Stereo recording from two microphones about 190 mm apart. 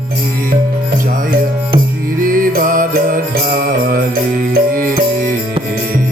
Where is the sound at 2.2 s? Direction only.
45° right (ahead or behind).